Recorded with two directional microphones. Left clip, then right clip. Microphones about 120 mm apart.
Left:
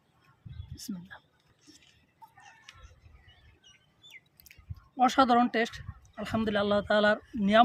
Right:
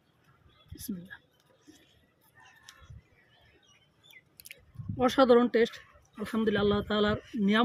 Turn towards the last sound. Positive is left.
turn(degrees=40)  # may be behind; listen again after turning